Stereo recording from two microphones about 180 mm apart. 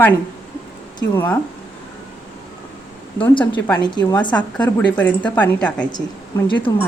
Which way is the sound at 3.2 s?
25° left (ahead or behind).